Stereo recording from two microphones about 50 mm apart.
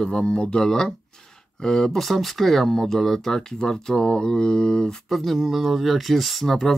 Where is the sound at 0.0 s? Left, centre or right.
Centre.